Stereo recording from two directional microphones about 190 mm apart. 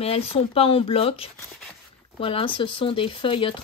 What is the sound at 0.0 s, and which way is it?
Speech, 30° left (ahead or behind).